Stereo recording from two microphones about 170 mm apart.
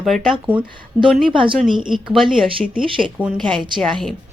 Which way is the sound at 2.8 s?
30° right (ahead or behind).